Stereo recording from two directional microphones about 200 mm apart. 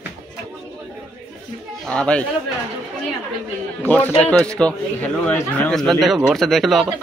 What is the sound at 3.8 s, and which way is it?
A man's voice, 10° left (ahead or behind).